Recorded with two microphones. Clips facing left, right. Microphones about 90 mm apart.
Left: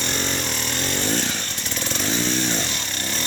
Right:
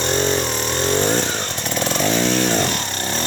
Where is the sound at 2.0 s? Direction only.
80° right.